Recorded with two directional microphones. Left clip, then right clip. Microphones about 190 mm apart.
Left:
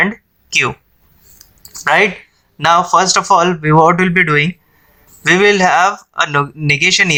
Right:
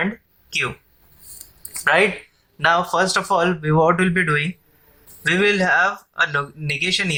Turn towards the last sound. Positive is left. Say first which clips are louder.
# left 10 dB
turn(degrees=40)  # may be behind; listen again after turning